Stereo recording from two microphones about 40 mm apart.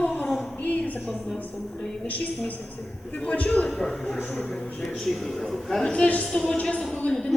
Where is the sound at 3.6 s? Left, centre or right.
Centre.